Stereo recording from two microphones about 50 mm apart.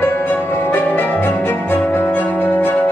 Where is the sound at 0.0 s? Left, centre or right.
Left.